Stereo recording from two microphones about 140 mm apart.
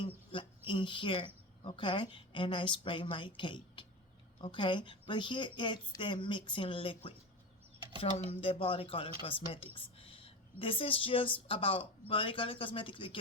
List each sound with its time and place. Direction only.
0.0 s a woman's voice: 40° left (ahead or behind)
8.1 s a woman's voice: 45° left (ahead or behind)
9.7 s a sound: 40° left (ahead or behind)
11.4 s a woman's voice: 40° left (ahead or behind)